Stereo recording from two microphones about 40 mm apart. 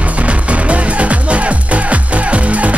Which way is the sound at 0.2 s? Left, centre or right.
Right.